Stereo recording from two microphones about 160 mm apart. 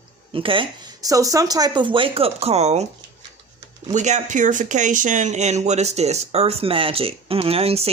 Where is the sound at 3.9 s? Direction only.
50° right (ahead or behind).